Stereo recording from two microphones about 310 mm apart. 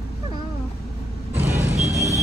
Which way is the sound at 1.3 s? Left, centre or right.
Centre.